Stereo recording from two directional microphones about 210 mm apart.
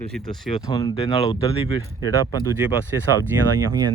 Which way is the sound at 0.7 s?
20° left (ahead or behind).